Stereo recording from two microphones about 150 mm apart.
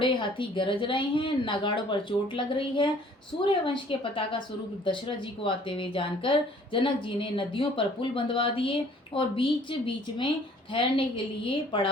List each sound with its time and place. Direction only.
0.0 s speech: 35° left (ahead or behind)